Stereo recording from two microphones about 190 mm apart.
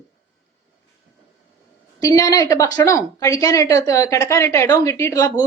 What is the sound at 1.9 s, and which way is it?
A woman's voice, 15° left (ahead or behind).